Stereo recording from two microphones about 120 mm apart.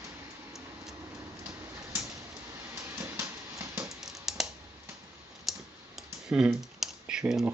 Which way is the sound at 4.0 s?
5° right (ahead or behind).